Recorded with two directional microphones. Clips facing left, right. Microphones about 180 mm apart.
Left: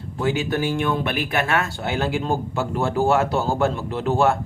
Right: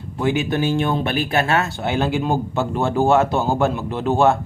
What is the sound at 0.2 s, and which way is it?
Speech, 20° right (ahead or behind).